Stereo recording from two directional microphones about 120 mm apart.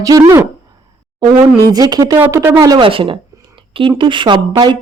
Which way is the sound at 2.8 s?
45° right (ahead or behind).